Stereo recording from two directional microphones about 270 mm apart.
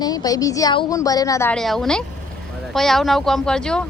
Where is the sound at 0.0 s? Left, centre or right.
Centre.